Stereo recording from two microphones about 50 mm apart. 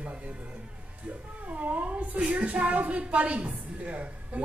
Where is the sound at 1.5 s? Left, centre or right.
Right.